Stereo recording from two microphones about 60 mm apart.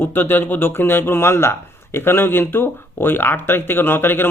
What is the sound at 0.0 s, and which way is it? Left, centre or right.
Speech, left.